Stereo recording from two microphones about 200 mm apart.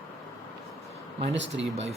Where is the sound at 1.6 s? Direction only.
30° right (ahead or behind).